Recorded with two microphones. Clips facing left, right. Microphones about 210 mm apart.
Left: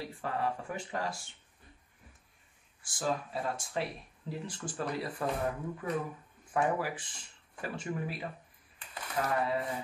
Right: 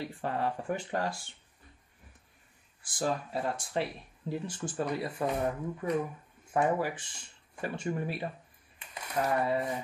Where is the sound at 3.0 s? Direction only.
Centre (ahead or behind).